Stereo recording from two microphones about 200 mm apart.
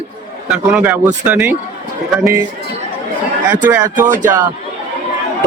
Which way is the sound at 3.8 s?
40° right (ahead or behind).